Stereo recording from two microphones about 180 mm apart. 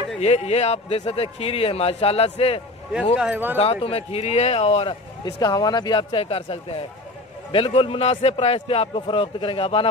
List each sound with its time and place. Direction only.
0.2 s speech: 35° left (ahead or behind)
3.2 s speech: 10° right (ahead or behind)
3.5 s speech: 35° left (ahead or behind)